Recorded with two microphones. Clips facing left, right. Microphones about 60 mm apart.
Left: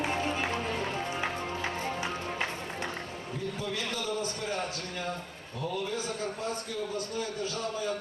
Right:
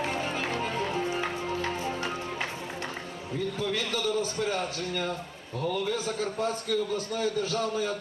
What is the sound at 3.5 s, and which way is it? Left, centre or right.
Speech, right.